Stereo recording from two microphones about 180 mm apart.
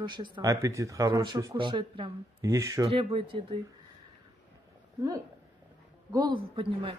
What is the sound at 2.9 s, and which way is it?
Speech, 30° right (ahead or behind).